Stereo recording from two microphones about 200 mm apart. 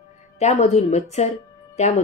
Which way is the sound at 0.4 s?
35° left (ahead or behind).